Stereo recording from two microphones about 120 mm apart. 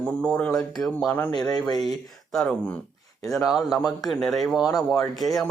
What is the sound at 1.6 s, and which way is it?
Speech, 35° left (ahead or behind).